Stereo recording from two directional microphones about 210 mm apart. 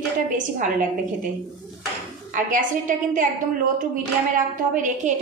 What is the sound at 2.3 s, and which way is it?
Speech, 40° right (ahead or behind).